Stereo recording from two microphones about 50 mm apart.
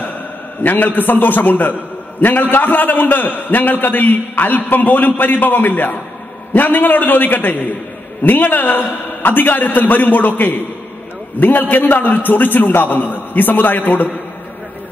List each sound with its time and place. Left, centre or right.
0.7 s a man's voice: left